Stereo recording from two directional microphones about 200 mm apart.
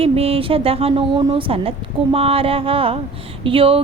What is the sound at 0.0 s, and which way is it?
A woman's voice, 30° right (ahead or behind).